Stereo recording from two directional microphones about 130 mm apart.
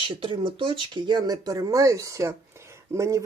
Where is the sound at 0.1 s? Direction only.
40° right (ahead or behind).